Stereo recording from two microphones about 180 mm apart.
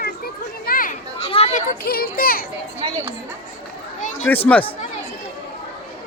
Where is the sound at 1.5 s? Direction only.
55° left (ahead or behind).